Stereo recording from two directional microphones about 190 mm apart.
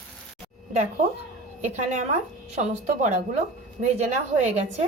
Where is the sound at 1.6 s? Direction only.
40° right (ahead or behind).